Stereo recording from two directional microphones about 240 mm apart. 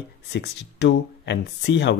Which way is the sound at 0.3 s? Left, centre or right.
Left.